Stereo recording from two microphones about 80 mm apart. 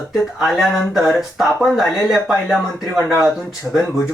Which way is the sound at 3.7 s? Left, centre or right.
Centre.